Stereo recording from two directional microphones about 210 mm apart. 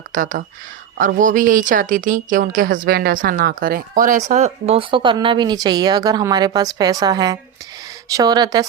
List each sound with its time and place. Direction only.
0.1 s a woman's voice: 40° right (ahead or behind); by 8.6 s 20° right (ahead or behind)